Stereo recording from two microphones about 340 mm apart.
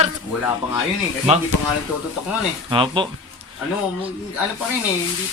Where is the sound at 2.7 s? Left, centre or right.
Centre.